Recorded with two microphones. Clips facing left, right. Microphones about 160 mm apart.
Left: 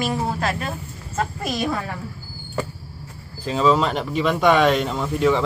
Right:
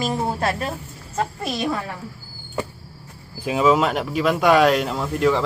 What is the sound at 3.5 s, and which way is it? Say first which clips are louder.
Speech: right 1 dB; 10° right (ahead or behind).